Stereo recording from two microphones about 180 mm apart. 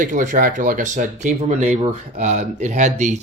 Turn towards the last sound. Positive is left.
turn(degrees=-40)  # may be behind; listen again after turning